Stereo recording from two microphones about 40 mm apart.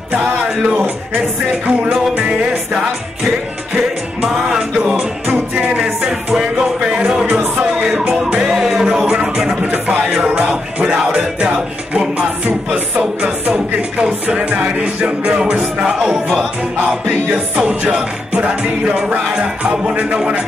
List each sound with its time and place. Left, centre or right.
1.7 s music: right
4.5 s music: centre
6.8 s speech: centre
8.4 s music: centre
9.8 s music: right
12.4 s music: right
15.2 s music: right
16.0 s music: centre
17.6 s music: right